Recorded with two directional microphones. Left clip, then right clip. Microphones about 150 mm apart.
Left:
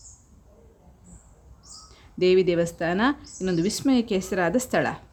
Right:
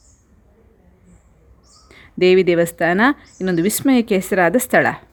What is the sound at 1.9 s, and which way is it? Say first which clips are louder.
A woman's voice: right 7 dB; 35° right (ahead or behind).